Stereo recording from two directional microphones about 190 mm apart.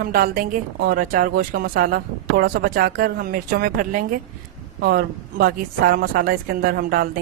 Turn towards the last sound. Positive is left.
turn(degrees=-55)  # may be behind; listen again after turning